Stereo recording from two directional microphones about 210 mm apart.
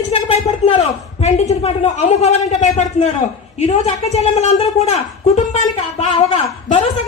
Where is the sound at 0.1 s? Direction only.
25° left (ahead or behind).